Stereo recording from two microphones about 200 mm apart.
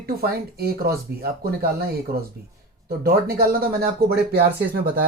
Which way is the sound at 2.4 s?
50° right (ahead or behind).